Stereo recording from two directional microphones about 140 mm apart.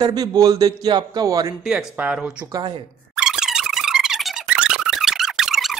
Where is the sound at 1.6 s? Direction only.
5° right (ahead or behind).